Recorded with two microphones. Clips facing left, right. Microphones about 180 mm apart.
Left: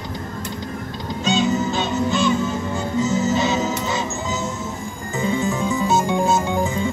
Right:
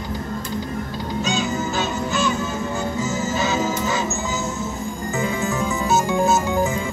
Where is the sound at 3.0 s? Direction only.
25° left (ahead or behind).